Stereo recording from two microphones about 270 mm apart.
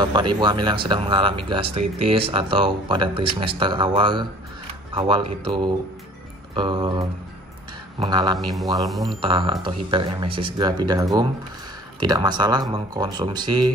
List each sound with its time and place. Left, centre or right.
0.0 s speech: centre
8.5 s speech: centre
9.2 s speech: centre